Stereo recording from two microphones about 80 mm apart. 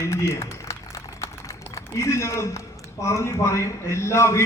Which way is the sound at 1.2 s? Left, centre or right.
Left.